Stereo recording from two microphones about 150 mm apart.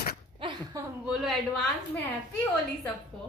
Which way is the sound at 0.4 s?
35° right (ahead or behind).